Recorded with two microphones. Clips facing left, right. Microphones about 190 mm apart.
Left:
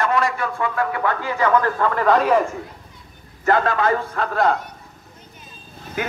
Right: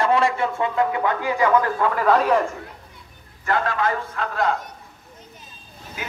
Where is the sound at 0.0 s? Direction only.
30° right (ahead or behind); by 2.3 s 5° right (ahead or behind).